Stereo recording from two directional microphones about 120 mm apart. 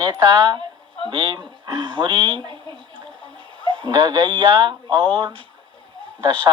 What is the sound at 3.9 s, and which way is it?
A woman's voice, 35° right (ahead or behind).